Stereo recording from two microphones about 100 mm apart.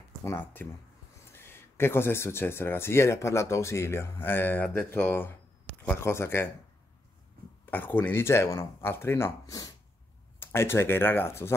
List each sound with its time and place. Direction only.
0.2 s speech: 25° left (ahead or behind)
7.7 s speech: 20° left (ahead or behind)
10.4 s speech: 25° left (ahead or behind)